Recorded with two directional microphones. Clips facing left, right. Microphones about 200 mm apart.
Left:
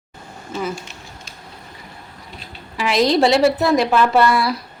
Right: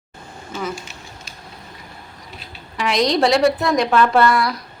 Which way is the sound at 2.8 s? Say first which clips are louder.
Left 2 dB; centre (ahead or behind).